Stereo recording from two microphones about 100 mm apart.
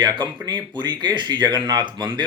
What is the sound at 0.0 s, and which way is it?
Speech, 50° right (ahead or behind).